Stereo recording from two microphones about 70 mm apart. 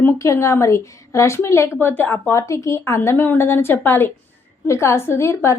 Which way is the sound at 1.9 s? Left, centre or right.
Left.